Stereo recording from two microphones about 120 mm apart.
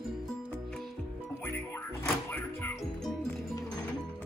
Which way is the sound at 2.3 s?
20° left (ahead or behind).